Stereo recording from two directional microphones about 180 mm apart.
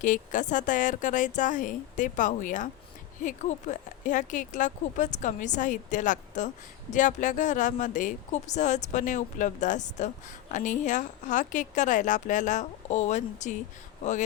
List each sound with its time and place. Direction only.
0.0 s speech: 45° left (ahead or behind)